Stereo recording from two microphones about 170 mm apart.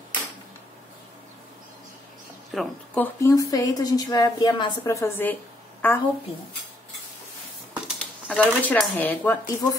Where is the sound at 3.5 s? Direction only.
20° left (ahead or behind).